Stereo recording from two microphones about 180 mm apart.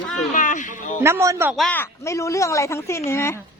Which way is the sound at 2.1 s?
15° left (ahead or behind).